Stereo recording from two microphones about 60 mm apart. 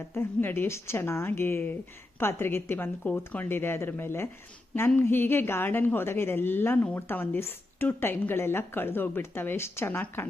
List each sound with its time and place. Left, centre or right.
0.1 s a woman's voice: left
3.0 s speech: left
3.5 s a woman's voice: left